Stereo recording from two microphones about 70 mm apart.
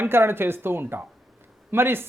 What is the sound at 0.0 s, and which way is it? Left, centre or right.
Speech, right.